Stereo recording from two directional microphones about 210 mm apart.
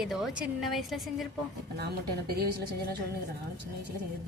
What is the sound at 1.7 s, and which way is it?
Speech, 50° right (ahead or behind).